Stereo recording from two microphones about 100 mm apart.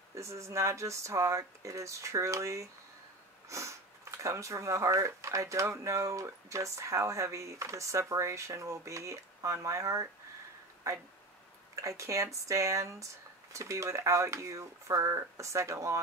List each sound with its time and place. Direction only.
0.1 s speech: 30° right (ahead or behind)